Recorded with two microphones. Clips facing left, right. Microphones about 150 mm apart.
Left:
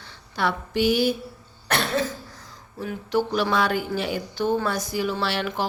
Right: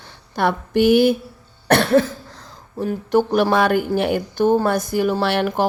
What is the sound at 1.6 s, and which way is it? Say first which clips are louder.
Cough: right 9 dB; 60° right (ahead or behind).